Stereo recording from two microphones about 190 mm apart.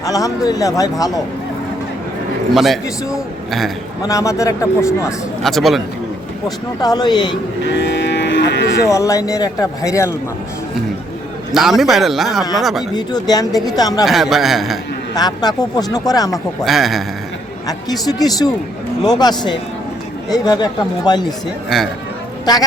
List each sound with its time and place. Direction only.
0.0 s speech: 20° left (ahead or behind)
2.5 s a man's voice: centre (ahead or behind)
4.0 s a man's voice: 15° left (ahead or behind)
5.4 s a man's voice: centre (ahead or behind)
6.8 s speech: 20° left (ahead or behind)
7.7 s cattle: 70° left (ahead or behind)
8.9 s a man's voice: 15° left (ahead or behind)
11.5 s a man's voice: centre (ahead or behind)
12.9 s speech: 20° left (ahead or behind)
14.0 s a man's voice: centre (ahead or behind)
15.1 s speech: 20° left (ahead or behind)
16.6 s a man's voice: centre (ahead or behind)
18.0 s speech: 20° left (ahead or behind)